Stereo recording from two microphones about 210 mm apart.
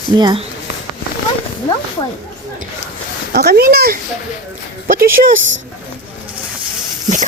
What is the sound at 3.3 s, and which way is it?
Speech, 50° right (ahead or behind).